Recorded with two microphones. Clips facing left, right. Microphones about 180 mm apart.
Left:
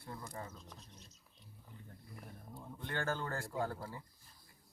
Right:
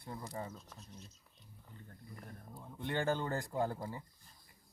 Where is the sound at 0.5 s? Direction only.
Centre (ahead or behind).